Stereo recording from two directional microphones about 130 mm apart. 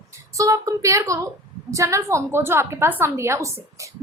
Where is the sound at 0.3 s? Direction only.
25° right (ahead or behind).